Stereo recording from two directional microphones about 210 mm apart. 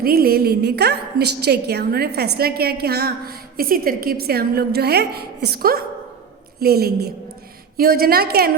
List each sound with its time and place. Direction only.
0.0 s a woman's voice: 45° right (ahead or behind)